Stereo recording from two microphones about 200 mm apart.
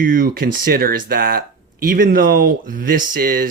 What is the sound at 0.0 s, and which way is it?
Speech, 45° right (ahead or behind).